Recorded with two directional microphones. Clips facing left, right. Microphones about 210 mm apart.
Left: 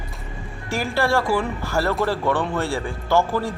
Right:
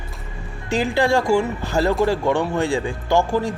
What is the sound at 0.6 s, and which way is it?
Speech, 15° right (ahead or behind).